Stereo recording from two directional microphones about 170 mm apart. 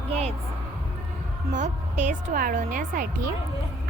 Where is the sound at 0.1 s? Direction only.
35° right (ahead or behind).